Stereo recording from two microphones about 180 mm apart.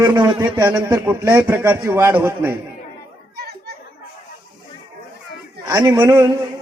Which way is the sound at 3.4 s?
60° right (ahead or behind).